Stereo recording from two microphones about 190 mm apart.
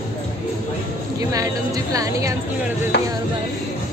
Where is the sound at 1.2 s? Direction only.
20° right (ahead or behind).